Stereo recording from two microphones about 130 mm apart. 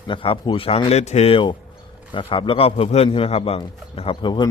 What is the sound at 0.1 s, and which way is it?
A man's voice, 40° left (ahead or behind).